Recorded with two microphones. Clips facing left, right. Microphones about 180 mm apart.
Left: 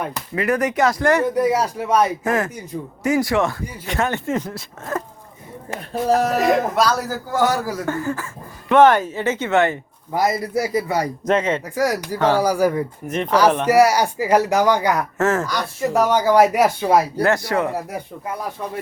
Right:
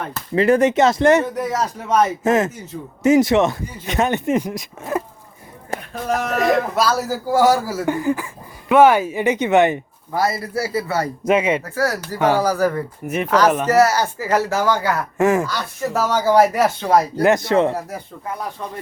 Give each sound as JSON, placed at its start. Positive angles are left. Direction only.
{"t": 0.3, "sound": "speech", "side_deg": -25}
{"t": 1.4, "sound": "speech", "side_deg": 10}
{"t": 2.2, "sound": "speech", "side_deg": -20}
{"t": 5.9, "sound": "speech", "side_deg": 35}
{"t": 6.5, "sound": "a man's voice", "side_deg": -5}
{"t": 10.2, "sound": "speech", "side_deg": 15}
{"t": 11.3, "sound": "a man's voice", "side_deg": -10}
{"t": 11.6, "sound": "speech", "side_deg": 15}
{"t": 13.1, "sound": "a man's voice", "side_deg": -10}
{"t": 13.7, "sound": "speech", "side_deg": 10}
{"t": 15.2, "sound": "a man's voice", "side_deg": -15}
{"t": 15.4, "sound": "speech", "side_deg": 15}
{"t": 17.2, "sound": "speech", "side_deg": -20}